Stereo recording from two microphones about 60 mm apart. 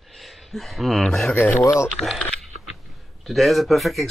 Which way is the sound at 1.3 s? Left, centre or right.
Left.